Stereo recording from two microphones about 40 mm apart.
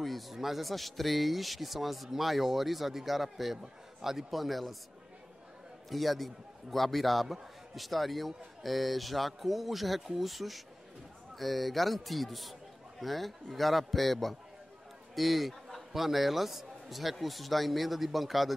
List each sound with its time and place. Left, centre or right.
0.0 s speech: centre
5.9 s speech: centre